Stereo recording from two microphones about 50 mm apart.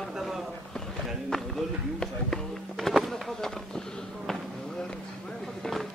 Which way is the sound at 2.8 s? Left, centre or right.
Centre.